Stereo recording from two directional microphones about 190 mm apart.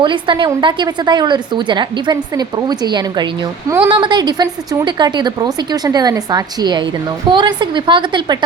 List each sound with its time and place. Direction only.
0.0 s a woman's voice: 25° right (ahead or behind)